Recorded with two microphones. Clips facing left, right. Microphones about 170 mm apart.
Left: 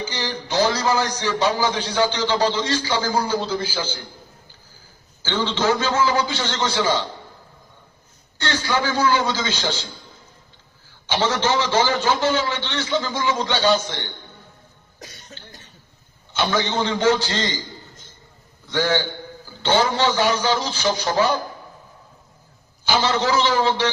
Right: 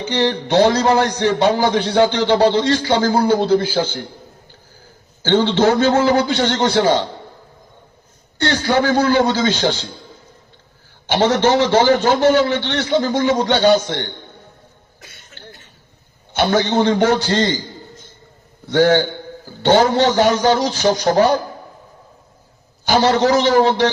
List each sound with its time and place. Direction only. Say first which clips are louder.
0.0 s a man's voice: right 9 dB; 65° right (ahead or behind)
5.2 s a man's voice: right 8 dB; 60° right (ahead or behind)
8.4 s a man's voice: right 7 dB; 55° right (ahead or behind)
11.1 s a man's voice: right 6 dB; 55° right (ahead or behind)
14.9 s cough: left 6 dB; 40° left (ahead or behind)
16.4 s a man's voice: right 6 dB; 55° right (ahead or behind)
18.7 s a man's voice: right 8 dB; 55° right (ahead or behind)
22.9 s a man's voice: right 6 dB; 45° right (ahead or behind)